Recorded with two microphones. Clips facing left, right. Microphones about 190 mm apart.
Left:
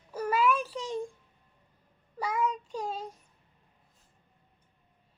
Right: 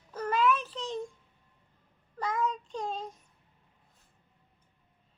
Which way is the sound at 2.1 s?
10° left (ahead or behind).